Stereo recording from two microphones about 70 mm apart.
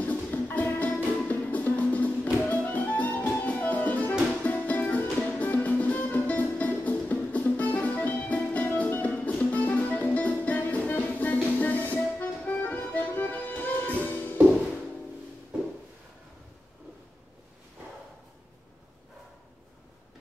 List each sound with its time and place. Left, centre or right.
0.0 s music: left
0.9 s music: centre